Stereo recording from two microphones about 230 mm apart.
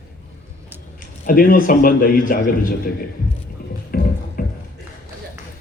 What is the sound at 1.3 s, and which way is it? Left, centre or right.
Speech, left.